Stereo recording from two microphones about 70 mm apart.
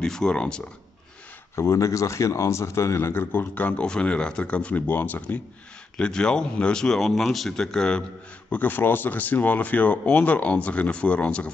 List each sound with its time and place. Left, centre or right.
0.0 s speech: centre
1.5 s speech: left
5.9 s speech: centre
8.5 s speech: left